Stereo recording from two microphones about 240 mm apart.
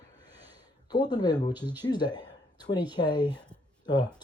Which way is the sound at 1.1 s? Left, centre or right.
Centre.